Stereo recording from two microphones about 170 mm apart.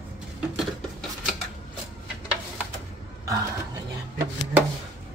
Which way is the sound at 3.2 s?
20° right (ahead or behind).